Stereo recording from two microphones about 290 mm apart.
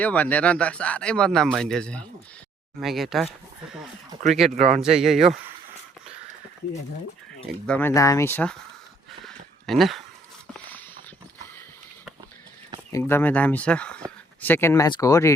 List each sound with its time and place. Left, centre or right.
0.0 s speech: centre
4.5 s a man's voice: right
4.8 s speech: centre
7.4 s speech: centre
9.2 s a sound: centre
12.9 s speech: centre